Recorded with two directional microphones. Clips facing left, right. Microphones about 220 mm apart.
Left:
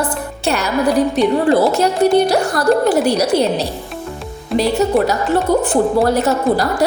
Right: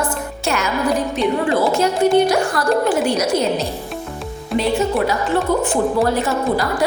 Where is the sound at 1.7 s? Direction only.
40° left (ahead or behind).